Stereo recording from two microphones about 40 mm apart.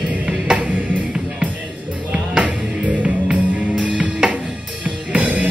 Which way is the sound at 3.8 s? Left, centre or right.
Right.